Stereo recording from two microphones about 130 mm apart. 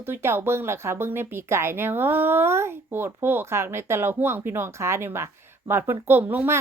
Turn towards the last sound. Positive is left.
turn(degrees=-15)  # may be behind; listen again after turning